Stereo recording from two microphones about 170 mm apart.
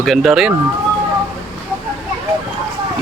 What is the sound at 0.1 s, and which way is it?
Speech, centre (ahead or behind).